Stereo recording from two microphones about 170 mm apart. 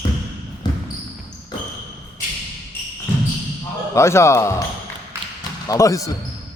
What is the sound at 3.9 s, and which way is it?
Speech, 15° left (ahead or behind).